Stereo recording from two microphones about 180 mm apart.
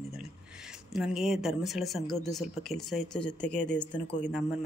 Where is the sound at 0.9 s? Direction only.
Centre (ahead or behind).